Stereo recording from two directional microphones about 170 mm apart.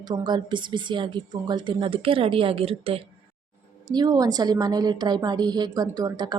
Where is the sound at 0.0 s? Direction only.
25° right (ahead or behind).